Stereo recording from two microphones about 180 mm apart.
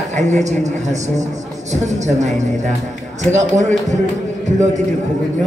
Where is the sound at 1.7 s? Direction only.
40° right (ahead or behind).